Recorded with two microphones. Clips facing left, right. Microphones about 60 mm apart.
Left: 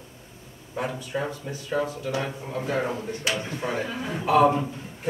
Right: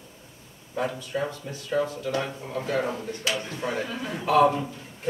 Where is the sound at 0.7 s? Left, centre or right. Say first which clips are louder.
Right 1 dB; centre.